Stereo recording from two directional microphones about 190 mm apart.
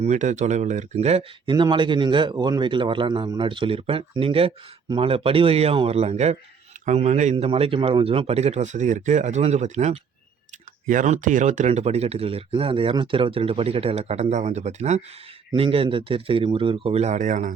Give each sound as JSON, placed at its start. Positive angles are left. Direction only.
{"t": 0.0, "sound": "speech", "side_deg": -40}